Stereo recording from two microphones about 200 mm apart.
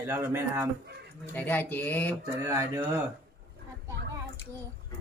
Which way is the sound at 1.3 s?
10° left (ahead or behind).